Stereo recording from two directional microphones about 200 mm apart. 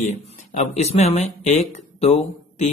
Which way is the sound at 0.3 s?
35° left (ahead or behind).